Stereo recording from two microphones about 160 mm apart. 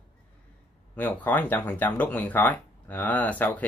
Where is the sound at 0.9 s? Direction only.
10° left (ahead or behind).